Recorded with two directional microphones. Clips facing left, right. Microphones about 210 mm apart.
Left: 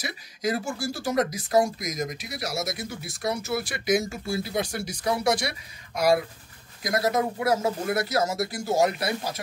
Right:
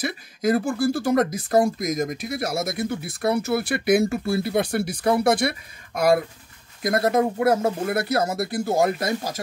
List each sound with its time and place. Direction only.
0.0 s speech: 55° right (ahead or behind)